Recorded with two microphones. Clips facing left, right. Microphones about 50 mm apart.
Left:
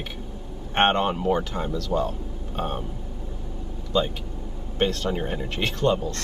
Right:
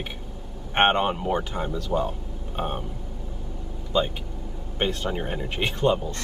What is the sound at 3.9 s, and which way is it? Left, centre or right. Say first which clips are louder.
Speech: even; centre.